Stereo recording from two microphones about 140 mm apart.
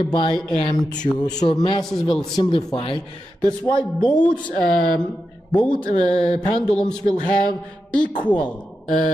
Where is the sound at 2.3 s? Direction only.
30° left (ahead or behind).